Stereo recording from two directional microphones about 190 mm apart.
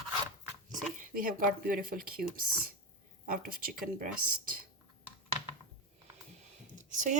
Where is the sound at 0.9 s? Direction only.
45° right (ahead or behind).